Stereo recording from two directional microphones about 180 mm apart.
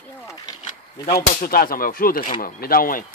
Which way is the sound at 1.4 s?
55° left (ahead or behind).